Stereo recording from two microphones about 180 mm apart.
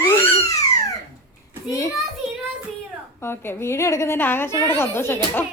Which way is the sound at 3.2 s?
15° left (ahead or behind).